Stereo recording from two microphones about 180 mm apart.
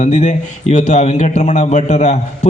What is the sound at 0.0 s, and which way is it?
A man's voice, 40° left (ahead or behind).